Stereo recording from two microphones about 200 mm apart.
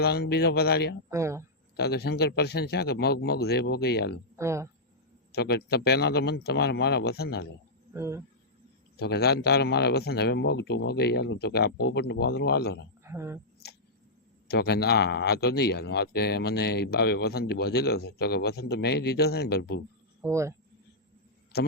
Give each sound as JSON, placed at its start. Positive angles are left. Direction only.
{"t": 0.0, "sound": "speech", "side_deg": 55}
{"t": 1.1, "sound": "speech", "side_deg": -15}
{"t": 1.7, "sound": "speech", "side_deg": 55}
{"t": 4.4, "sound": "speech", "side_deg": -15}
{"t": 5.3, "sound": "speech", "side_deg": 55}
{"t": 7.9, "sound": "speech", "side_deg": -15}
{"t": 9.0, "sound": "speech", "side_deg": 55}
{"t": 13.1, "sound": "speech", "side_deg": -15}
{"t": 14.4, "sound": "speech", "side_deg": 55}
{"t": 20.2, "sound": "speech", "side_deg": -15}
{"t": 21.5, "sound": "a man's voice", "side_deg": 50}